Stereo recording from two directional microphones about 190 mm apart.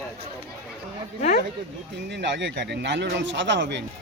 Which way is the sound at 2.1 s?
65° right (ahead or behind).